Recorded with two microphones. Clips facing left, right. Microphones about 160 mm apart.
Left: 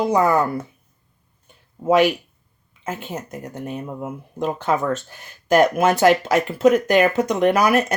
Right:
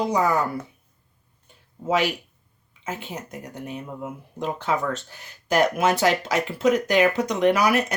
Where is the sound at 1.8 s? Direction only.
55° left (ahead or behind).